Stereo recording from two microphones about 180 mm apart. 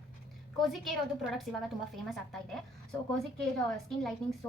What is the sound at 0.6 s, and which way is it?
A woman's voice, centre (ahead or behind).